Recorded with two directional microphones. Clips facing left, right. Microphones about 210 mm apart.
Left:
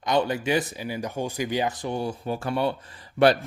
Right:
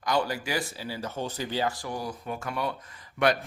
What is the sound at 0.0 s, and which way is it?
A man's voice, 20° left (ahead or behind).